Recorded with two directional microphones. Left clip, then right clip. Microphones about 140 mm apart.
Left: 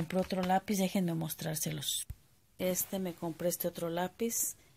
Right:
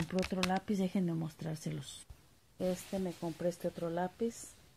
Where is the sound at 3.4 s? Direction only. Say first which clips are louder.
Left 2 dB; 20° left (ahead or behind).